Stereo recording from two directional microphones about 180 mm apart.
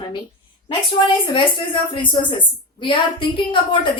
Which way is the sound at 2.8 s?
30° left (ahead or behind).